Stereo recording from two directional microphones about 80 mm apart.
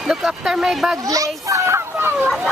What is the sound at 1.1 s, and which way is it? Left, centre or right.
Children playing, right.